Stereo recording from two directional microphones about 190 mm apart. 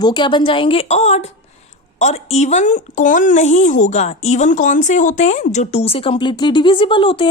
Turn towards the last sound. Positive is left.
turn(degrees=25)  # may be behind; listen again after turning